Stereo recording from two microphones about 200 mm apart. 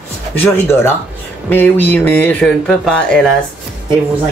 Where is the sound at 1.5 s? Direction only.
10° left (ahead or behind).